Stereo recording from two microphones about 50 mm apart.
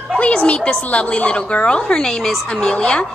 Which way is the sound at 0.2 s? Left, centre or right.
Left.